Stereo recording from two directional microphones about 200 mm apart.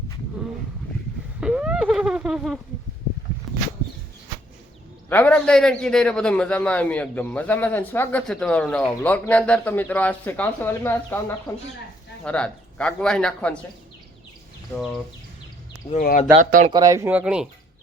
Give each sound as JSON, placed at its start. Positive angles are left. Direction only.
{"t": 1.4, "sound": "a sound", "side_deg": -5}
{"t": 5.0, "sound": "a man's voice", "side_deg": 10}
{"t": 15.9, "sound": "speech", "side_deg": 40}
{"t": 16.4, "sound": "speech", "side_deg": -40}
{"t": 16.7, "sound": "speech", "side_deg": -15}